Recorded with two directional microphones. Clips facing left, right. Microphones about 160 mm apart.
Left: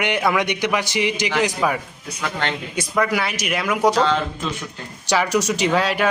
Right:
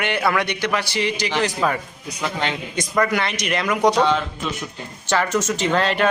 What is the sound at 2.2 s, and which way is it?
Mantra, 15° right (ahead or behind).